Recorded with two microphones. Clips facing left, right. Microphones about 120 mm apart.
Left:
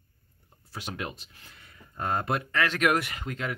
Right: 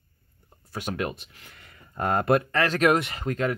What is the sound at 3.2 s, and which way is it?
Speech, 45° right (ahead or behind).